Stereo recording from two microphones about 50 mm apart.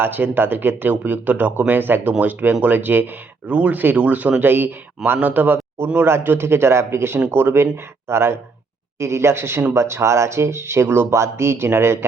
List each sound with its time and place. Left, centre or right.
0.0 s speech: right
5.9 s speech: right
9.0 s speech: right
11.1 s speech: right